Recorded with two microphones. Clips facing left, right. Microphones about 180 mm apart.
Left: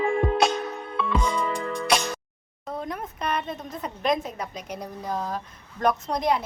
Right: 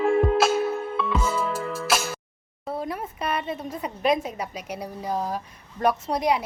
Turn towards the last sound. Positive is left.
turn(degrees=-10)  # may be behind; listen again after turning